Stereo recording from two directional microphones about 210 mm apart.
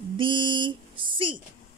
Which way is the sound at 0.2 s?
25° right (ahead or behind).